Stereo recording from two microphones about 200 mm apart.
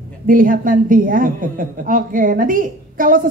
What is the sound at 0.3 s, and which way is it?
A woman's voice, 45° right (ahead or behind).